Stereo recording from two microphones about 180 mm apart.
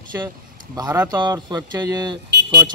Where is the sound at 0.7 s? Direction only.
20° right (ahead or behind).